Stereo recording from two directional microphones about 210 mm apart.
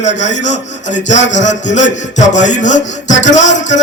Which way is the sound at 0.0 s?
35° left (ahead or behind).